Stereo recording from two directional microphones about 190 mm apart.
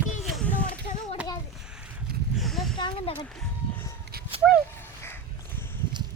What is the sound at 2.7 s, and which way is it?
Speech, 25° left (ahead or behind).